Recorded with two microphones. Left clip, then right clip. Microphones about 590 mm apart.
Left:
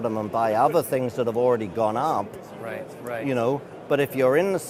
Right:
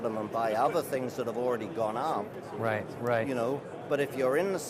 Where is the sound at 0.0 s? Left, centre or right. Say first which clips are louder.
Left 7 dB; left.